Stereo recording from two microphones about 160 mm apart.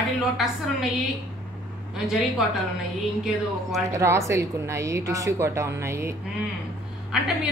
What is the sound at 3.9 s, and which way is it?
A woman's voice, 20° right (ahead or behind).